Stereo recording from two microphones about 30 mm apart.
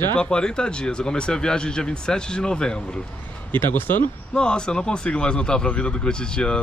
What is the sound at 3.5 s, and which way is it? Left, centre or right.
Speech, left.